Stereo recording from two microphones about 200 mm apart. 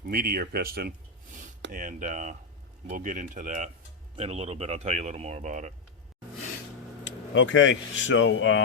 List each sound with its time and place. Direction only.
0.0 s speech: 50° right (ahead or behind)
7.0 s speech: 65° left (ahead or behind)